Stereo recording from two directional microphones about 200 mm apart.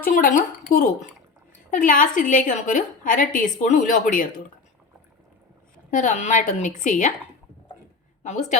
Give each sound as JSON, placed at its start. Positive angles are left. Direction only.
{"t": 0.0, "sound": "a woman's voice", "side_deg": 40}
{"t": 5.9, "sound": "a woman's voice", "side_deg": 40}
{"t": 8.2, "sound": "a woman's voice", "side_deg": 35}